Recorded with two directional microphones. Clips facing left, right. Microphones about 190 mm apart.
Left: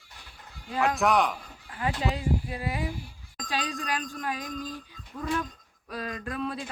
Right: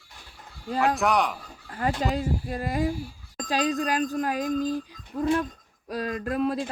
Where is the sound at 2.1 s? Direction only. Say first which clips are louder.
Right 2 dB; 45° right (ahead or behind).